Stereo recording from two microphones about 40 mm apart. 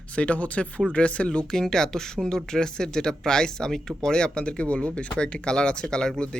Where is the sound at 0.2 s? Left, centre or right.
Left.